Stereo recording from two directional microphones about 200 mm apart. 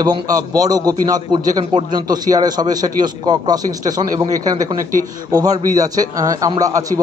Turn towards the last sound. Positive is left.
turn(degrees=-15)  # may be behind; listen again after turning